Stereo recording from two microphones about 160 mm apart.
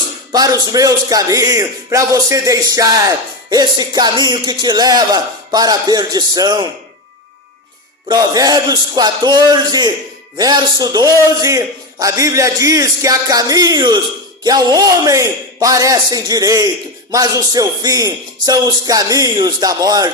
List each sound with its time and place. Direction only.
0.3 s speech: 25° right (ahead or behind)
8.0 s speech: 25° right (ahead or behind)